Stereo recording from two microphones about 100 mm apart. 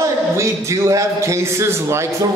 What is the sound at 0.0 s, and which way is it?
A man's voice, 30° right (ahead or behind).